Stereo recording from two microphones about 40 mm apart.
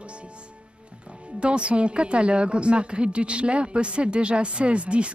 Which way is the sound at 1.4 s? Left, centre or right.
Right.